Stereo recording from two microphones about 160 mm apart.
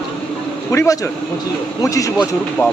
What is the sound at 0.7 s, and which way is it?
A man's voice, 15° left (ahead or behind).